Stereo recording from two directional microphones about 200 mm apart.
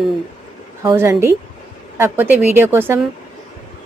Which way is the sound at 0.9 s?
15° right (ahead or behind).